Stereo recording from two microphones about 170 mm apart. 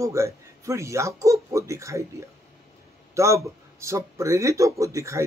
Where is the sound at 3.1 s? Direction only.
20° right (ahead or behind).